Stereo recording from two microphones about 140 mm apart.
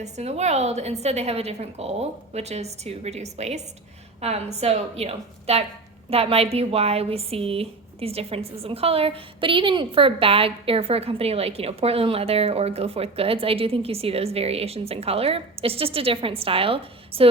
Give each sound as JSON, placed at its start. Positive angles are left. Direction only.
{"t": 0.0, "sound": "a woman's voice", "side_deg": -50}